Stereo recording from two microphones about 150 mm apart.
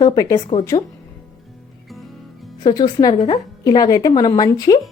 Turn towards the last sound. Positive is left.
turn(degrees=25)  # may be behind; listen again after turning